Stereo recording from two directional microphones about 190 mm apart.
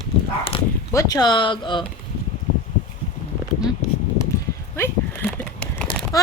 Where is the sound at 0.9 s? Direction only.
20° left (ahead or behind).